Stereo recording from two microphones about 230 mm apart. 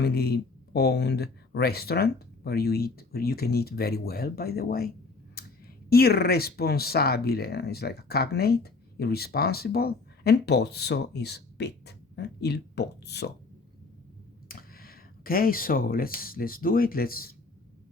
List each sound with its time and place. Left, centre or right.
0.0 s speech: left
5.4 s a sound: left
5.9 s speech: left
14.4 s speech: left